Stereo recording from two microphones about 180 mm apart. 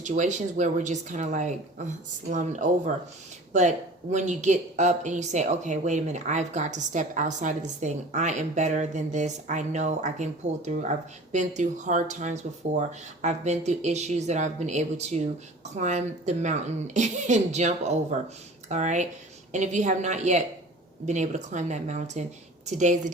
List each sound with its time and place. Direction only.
0.0 s speech: 45° right (ahead or behind)